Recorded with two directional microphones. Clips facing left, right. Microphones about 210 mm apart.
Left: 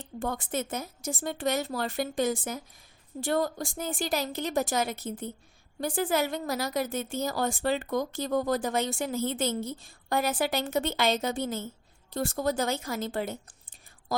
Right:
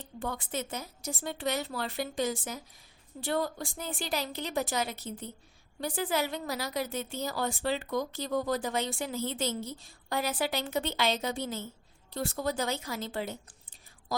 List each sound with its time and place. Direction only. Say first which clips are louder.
0.0 s a woman's voice: left 4 dB; 45° left (ahead or behind)